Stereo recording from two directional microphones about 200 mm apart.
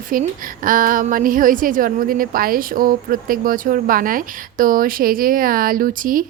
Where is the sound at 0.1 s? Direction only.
45° right (ahead or behind).